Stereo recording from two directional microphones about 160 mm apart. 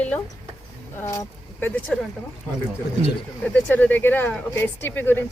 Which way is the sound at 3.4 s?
10° left (ahead or behind).